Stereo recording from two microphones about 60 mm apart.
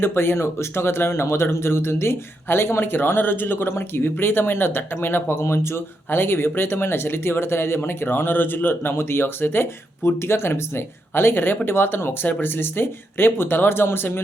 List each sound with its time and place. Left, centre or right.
0.0 s speech: left